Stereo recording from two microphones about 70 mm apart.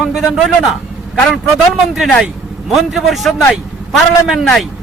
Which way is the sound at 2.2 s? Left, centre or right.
Centre.